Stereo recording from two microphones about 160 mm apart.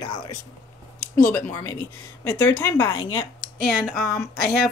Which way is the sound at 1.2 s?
15° left (ahead or behind).